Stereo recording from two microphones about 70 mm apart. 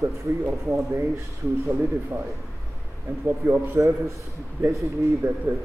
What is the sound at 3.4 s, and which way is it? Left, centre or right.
A man's voice, right.